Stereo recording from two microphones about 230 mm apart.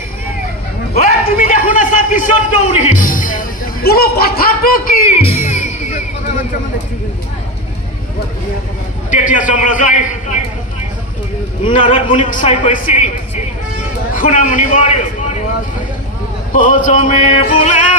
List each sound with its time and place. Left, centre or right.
0.9 s a sound: left
2.8 s music: left
5.2 s music: left
9.1 s a man's voice: left
11.6 s a man's voice: left
12.3 s music: left
14.1 s a man's voice: left
16.5 s music: left